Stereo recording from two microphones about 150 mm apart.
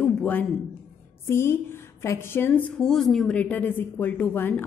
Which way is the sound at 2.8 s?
5° left (ahead or behind).